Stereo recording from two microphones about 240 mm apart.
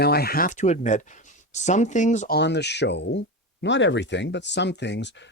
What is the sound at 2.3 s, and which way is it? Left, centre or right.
Speech, left.